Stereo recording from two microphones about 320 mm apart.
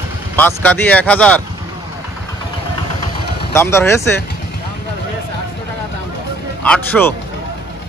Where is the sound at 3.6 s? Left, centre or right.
Centre.